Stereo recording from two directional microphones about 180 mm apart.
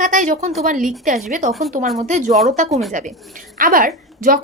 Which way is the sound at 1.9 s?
40° right (ahead or behind).